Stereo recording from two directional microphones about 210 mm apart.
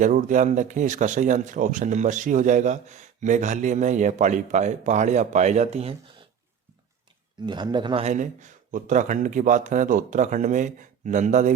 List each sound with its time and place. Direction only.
0.0 s speech: 40° right (ahead or behind)
7.4 s speech: 20° right (ahead or behind)